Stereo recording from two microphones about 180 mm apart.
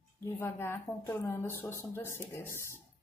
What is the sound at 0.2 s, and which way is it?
A woman's voice, 15° left (ahead or behind).